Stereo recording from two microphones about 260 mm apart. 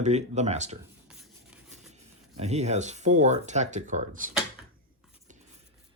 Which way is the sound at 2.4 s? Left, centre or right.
Right.